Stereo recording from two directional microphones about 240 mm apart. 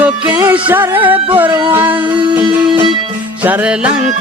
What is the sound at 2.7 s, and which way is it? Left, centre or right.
Music, right.